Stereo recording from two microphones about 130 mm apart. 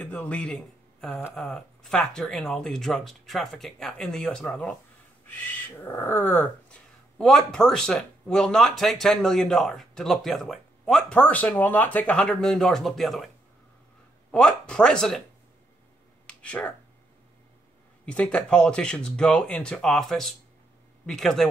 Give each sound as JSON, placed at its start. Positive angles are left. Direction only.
{"t": 0.0, "sound": "speech", "side_deg": 10}
{"t": 1.3, "sound": "speech", "side_deg": 5}
{"t": 7.2, "sound": "speech", "side_deg": 5}
{"t": 14.3, "sound": "speech", "side_deg": 5}
{"t": 16.3, "sound": "a sound", "side_deg": 10}
{"t": 18.0, "sound": "speech", "side_deg": 10}